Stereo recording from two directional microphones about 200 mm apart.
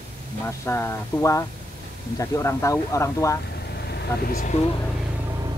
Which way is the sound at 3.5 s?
55° left (ahead or behind).